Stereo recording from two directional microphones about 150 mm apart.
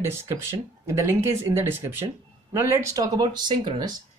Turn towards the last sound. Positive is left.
turn(degrees=-30)  # may be behind; listen again after turning